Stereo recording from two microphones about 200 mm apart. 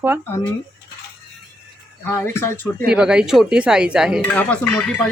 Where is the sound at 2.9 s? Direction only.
5° right (ahead or behind).